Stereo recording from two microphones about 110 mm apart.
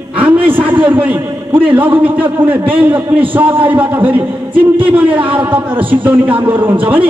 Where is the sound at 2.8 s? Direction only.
15° right (ahead or behind).